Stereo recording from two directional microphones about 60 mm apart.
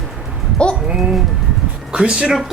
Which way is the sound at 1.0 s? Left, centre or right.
Centre.